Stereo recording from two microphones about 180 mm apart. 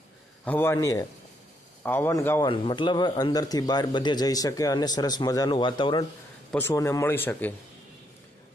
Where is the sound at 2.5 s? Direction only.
25° left (ahead or behind).